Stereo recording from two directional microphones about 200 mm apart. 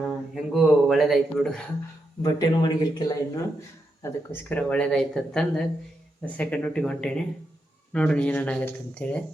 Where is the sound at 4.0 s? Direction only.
10° left (ahead or behind).